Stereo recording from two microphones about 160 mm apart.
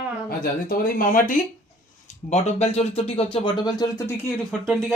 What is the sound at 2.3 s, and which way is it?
A woman's voice, 45° left (ahead or behind).